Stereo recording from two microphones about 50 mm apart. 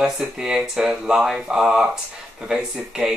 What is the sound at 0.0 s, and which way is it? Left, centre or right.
Speech, centre.